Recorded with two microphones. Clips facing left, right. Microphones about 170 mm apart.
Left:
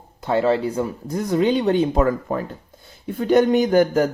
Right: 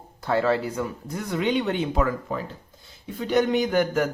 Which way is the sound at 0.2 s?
20° left (ahead or behind).